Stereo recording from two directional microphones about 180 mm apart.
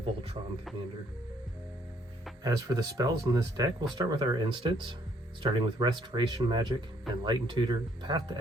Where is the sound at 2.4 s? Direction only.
20° right (ahead or behind).